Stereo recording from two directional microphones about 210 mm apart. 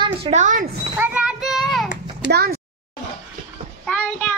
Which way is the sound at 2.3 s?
50° right (ahead or behind).